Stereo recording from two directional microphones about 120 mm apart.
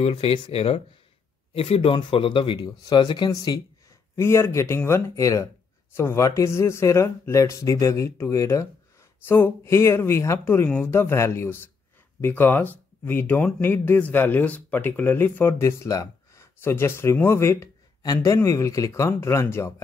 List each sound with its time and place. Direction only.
0.0 s speech: 50° left (ahead or behind); by 3.6 s 35° left (ahead or behind)
4.2 s speech: 20° left (ahead or behind)